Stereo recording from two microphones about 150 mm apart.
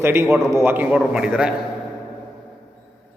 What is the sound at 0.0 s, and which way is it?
A man's voice, 15° right (ahead or behind).